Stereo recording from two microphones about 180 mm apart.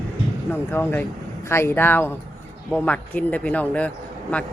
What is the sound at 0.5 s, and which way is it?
A man's voice, 10° left (ahead or behind).